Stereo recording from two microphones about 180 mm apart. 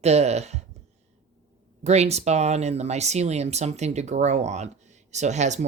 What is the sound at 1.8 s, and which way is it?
Speech, 35° right (ahead or behind).